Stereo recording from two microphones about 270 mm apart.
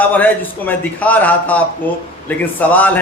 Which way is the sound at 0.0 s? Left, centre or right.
Centre.